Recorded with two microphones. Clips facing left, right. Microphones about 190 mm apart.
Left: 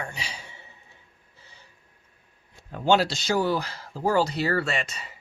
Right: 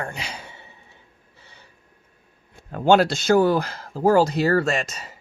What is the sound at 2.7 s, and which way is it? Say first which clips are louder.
Speech: right 5 dB; 55° right (ahead or behind).